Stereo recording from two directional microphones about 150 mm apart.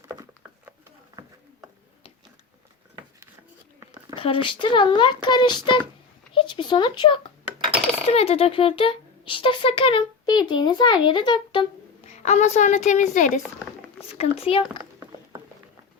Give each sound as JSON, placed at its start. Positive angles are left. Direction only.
{"t": 1.2, "sound": "a sound", "side_deg": -30}
{"t": 4.1, "sound": "speech", "side_deg": 35}
{"t": 8.1, "sound": "speech", "side_deg": 40}
{"t": 12.0, "sound": "a woman's voice", "side_deg": 50}
{"t": 14.1, "sound": "speech", "side_deg": 40}